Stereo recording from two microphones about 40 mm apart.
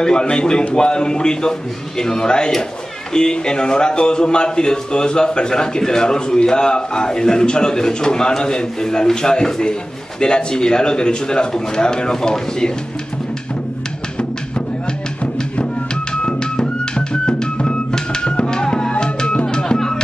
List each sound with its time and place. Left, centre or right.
0.0 s speech: left
17.1 s music: left